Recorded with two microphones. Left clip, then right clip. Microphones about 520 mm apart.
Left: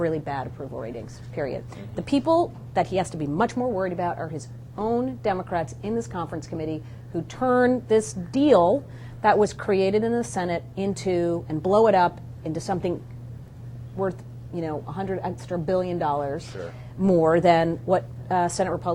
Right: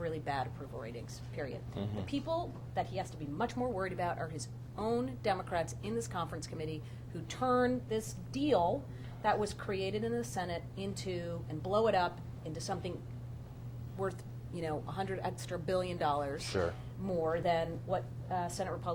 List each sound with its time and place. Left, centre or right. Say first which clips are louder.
0.0 s a woman's voice: left 10 dB; left
14.0 s a woman's voice: left 11 dB; left
17.1 s a woman's voice: left 14 dB; left